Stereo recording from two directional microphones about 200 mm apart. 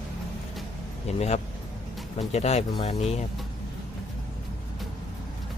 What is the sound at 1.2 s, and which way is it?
Speech, 35° left (ahead or behind).